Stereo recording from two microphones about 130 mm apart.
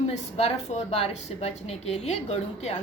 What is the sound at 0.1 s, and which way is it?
A woman's voice, 60° left (ahead or behind).